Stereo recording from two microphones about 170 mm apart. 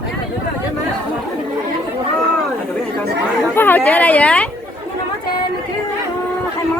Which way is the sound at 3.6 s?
10° left (ahead or behind).